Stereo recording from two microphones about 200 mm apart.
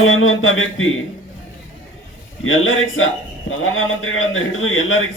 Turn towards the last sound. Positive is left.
turn(degrees=85)